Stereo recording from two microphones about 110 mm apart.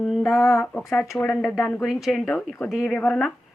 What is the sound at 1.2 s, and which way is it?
Speech, 20° left (ahead or behind).